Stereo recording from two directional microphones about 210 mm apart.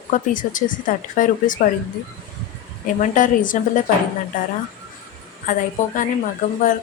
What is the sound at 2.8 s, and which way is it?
Speech, 40° left (ahead or behind).